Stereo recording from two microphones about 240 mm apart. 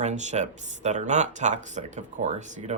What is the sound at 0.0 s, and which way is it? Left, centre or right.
Speech, right.